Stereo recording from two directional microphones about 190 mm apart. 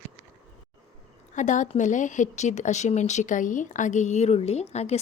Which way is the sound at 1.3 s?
40° left (ahead or behind).